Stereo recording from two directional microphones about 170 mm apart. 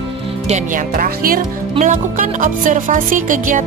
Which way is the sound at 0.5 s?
50° right (ahead or behind).